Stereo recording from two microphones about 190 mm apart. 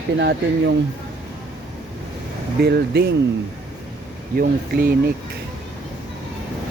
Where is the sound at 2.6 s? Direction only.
60° right (ahead or behind).